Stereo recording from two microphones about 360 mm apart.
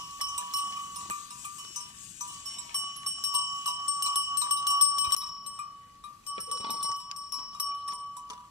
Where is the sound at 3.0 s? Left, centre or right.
Centre.